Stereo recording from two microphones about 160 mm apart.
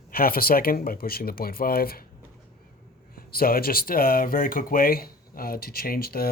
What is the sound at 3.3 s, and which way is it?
Speech, 70° left (ahead or behind).